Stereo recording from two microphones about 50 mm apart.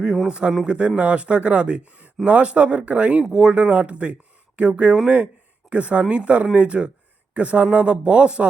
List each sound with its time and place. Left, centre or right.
0.3 s speech: centre